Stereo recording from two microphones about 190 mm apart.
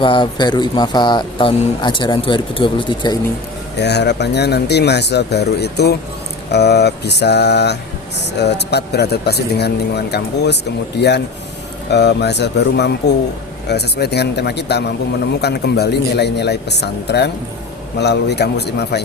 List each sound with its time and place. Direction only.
0.0 s speech: 25° left (ahead or behind)
3.8 s a man's voice: 60° left (ahead or behind)